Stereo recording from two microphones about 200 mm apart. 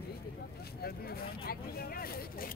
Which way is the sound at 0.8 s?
50° left (ahead or behind).